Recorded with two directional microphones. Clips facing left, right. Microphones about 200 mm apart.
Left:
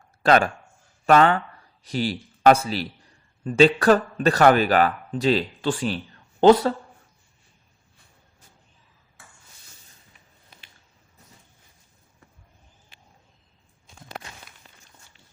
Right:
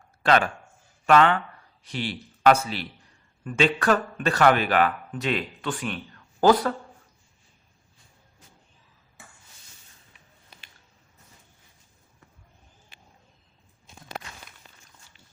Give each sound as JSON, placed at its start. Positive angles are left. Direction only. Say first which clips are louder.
{"t": 0.2, "sound": "speech", "louder": "left 3 dB", "side_deg": 40}